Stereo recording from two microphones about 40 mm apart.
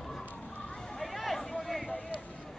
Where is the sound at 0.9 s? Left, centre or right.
Centre.